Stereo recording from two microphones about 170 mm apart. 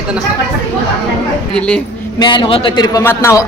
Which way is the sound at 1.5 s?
5° left (ahead or behind).